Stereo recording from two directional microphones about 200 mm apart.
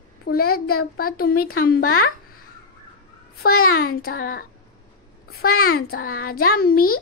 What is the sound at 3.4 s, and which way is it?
Speech, 45° left (ahead or behind).